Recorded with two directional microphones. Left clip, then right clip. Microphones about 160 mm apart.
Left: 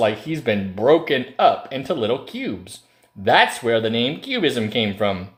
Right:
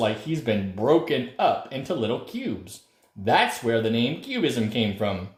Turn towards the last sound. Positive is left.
turn(degrees=20)  # may be behind; listen again after turning